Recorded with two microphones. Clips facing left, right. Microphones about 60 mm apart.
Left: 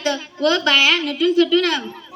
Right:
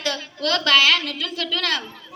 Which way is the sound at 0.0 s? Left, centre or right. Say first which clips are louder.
Left 6 dB; centre.